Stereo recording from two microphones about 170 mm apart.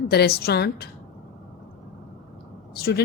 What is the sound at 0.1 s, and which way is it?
Speech, 70° left (ahead or behind).